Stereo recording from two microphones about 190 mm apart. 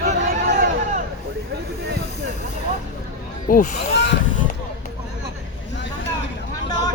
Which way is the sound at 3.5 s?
45° left (ahead or behind).